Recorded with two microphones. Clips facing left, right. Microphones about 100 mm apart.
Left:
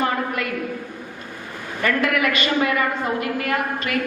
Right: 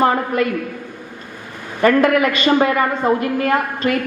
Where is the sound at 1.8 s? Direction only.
30° right (ahead or behind).